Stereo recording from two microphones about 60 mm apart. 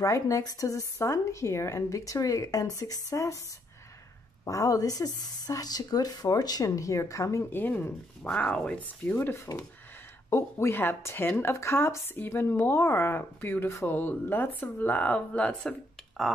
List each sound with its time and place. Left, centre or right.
0.0 s speech: left
1.0 s speech: left
4.5 s a woman's voice: left
7.5 s speech: left
16.2 s speech: centre